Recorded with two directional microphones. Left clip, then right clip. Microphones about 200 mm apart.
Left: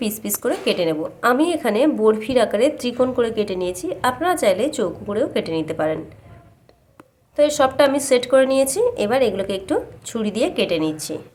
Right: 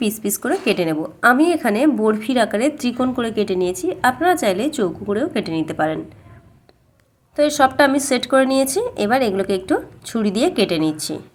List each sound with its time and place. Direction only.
0.0 s a woman's voice: 5° right (ahead or behind)
7.3 s a woman's voice: 10° right (ahead or behind)